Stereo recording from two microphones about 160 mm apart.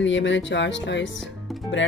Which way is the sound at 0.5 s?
90° left.